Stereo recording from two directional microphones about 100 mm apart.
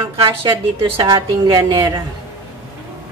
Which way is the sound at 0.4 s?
65° right (ahead or behind).